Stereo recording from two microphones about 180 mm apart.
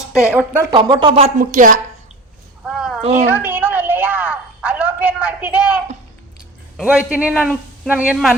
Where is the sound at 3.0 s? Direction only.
35° right (ahead or behind).